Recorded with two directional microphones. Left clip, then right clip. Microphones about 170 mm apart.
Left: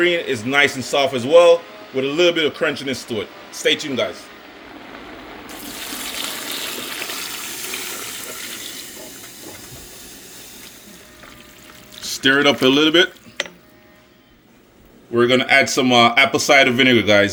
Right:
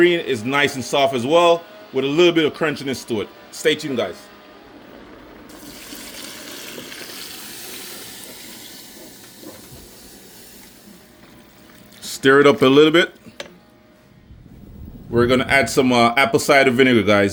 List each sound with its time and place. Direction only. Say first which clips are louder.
0.0 s a man's voice: right 2 dB; 45° right (ahead or behind)
12.0 s speech: right 2 dB; 35° right (ahead or behind)
15.1 s speech: left 2 dB; 35° right (ahead or behind)